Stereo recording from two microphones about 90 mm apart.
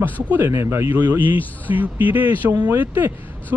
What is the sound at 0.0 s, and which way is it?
Speech, 25° right (ahead or behind).